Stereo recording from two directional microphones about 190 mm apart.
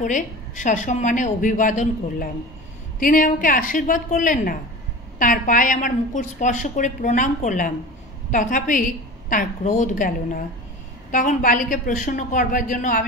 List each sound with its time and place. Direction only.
0.0 s a woman's voice: 40° left (ahead or behind)